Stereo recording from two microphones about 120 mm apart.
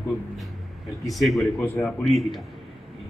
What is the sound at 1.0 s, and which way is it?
A man's voice, centre (ahead or behind).